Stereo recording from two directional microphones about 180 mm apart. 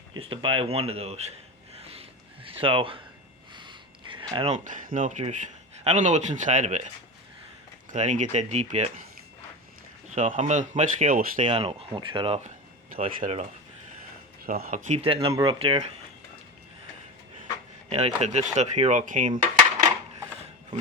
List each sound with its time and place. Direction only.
0.1 s speech: 30° right (ahead or behind)
1.7 s a sound: 35° right (ahead or behind)
3.5 s speech: 25° right (ahead or behind)
10.2 s speech: 40° right (ahead or behind)
11.4 s speech: 30° right (ahead or behind)
13.1 s speech: 45° right (ahead or behind)
14.4 s speech: 55° right (ahead or behind)
14.8 s speech: 35° right (ahead or behind)
17.8 s speech: 35° right (ahead or behind)